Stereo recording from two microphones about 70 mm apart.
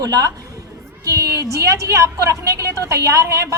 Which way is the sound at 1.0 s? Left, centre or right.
Right.